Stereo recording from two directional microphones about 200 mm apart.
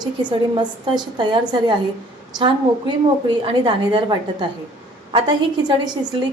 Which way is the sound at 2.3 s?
20° right (ahead or behind).